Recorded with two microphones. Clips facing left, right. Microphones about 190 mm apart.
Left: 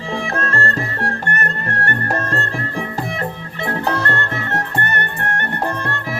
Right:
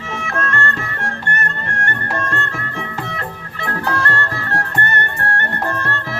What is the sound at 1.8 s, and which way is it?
Music, 35° left (ahead or behind).